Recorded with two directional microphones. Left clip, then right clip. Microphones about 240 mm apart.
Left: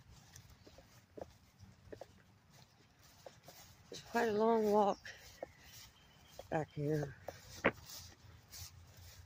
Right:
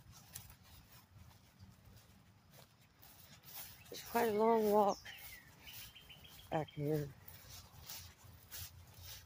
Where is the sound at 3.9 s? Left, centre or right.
Centre.